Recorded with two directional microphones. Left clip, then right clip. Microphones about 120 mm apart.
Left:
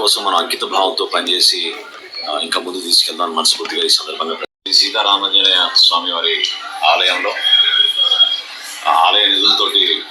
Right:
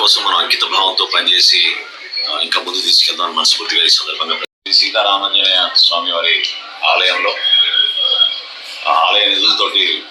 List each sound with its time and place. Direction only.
0.0 s speech: 20° right (ahead or behind)